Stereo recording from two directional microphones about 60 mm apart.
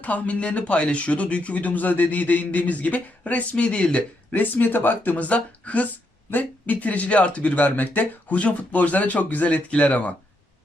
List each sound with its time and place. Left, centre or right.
0.0 s speech: left